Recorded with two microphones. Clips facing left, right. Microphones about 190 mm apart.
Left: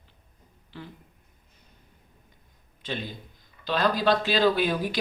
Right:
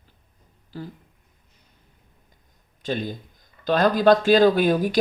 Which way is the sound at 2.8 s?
45° right (ahead or behind).